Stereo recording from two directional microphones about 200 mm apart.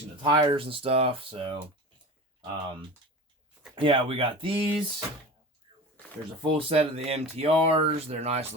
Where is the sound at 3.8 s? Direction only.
25° right (ahead or behind).